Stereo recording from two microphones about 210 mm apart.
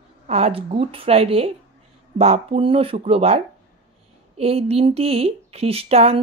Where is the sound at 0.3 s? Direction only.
30° right (ahead or behind).